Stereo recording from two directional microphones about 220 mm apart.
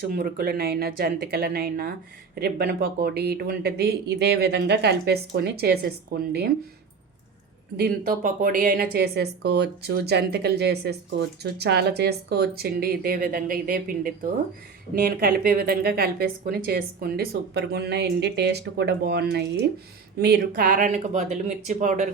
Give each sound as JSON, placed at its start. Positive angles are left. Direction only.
{"t": 0.1, "sound": "a woman's voice", "side_deg": -40}
{"t": 7.8, "sound": "a woman's voice", "side_deg": -40}